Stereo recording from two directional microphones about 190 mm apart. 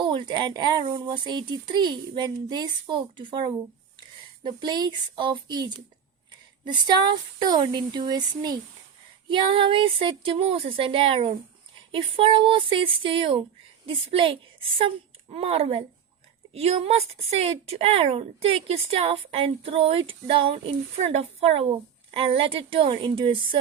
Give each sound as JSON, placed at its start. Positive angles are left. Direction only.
{"t": 0.0, "sound": "speech", "side_deg": -25}